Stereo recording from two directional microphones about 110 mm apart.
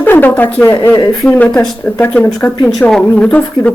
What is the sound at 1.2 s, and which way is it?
Speech, 10° left (ahead or behind).